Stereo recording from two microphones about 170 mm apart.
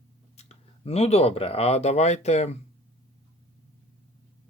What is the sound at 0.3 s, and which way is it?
Speech, 40° left (ahead or behind).